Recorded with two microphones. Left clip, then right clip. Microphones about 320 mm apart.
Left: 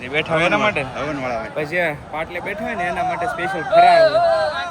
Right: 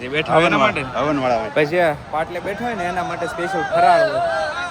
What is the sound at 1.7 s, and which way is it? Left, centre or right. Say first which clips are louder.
Speech: right 3 dB; centre.